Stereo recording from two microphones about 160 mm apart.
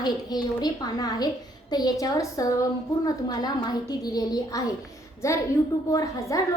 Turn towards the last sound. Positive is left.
turn(degrees=20)  # may be behind; listen again after turning